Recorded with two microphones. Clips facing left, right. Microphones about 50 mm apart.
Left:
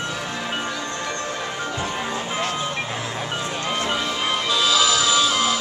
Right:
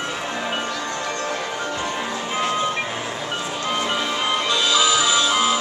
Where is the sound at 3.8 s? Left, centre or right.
Centre.